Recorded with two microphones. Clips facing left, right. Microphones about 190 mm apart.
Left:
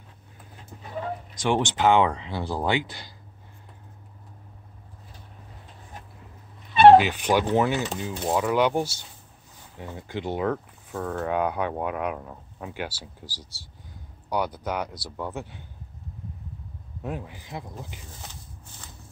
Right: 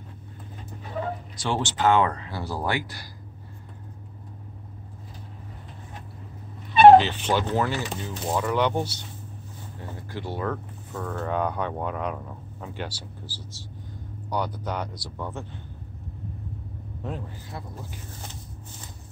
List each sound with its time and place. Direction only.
1.3 s speech: 15° left (ahead or behind)
7.0 s speech: 10° left (ahead or behind)
17.0 s speech: 10° left (ahead or behind)